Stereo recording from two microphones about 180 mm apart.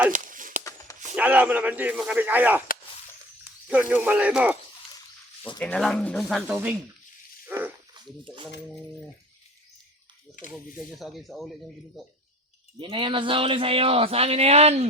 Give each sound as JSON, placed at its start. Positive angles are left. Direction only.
{"t": 0.1, "sound": "a sound", "side_deg": -45}
{"t": 1.1, "sound": "speech", "side_deg": -10}
{"t": 3.7, "sound": "speech", "side_deg": -10}
{"t": 5.5, "sound": "speech", "side_deg": 5}
{"t": 7.4, "sound": "dog", "side_deg": -10}
{"t": 7.9, "sound": "speech", "side_deg": -25}
{"t": 10.9, "sound": "speech", "side_deg": 0}
{"t": 12.8, "sound": "speech", "side_deg": -30}